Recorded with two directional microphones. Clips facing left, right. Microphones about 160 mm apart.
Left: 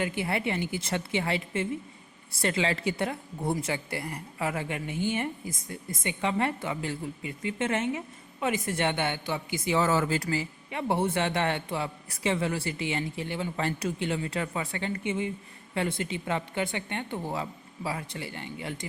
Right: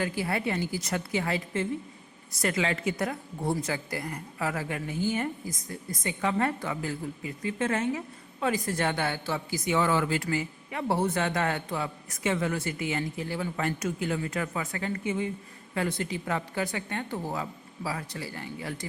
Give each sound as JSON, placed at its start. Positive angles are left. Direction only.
{"t": 0.0, "sound": "speech", "side_deg": 20}
{"t": 9.6, "sound": "speech", "side_deg": 35}